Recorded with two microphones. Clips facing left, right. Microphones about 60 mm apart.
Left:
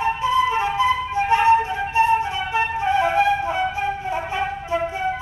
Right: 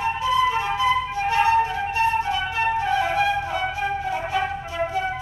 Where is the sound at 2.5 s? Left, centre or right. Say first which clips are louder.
Left 3 dB; left.